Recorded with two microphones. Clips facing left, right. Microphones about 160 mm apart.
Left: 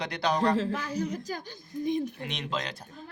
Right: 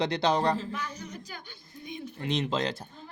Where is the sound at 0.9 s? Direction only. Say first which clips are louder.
Left 9 dB; 35° left (ahead or behind).